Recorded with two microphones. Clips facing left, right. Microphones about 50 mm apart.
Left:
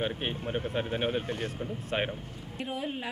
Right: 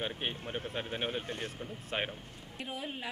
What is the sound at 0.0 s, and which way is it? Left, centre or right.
A woman's voice, centre.